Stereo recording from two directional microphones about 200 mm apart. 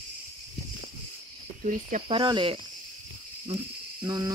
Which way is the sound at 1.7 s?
40° right (ahead or behind).